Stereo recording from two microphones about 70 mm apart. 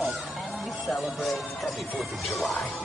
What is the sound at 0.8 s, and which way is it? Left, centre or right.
Speech, centre.